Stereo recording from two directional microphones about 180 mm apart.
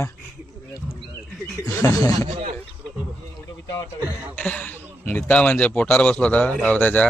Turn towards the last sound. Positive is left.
turn(degrees=10)  # may be behind; listen again after turning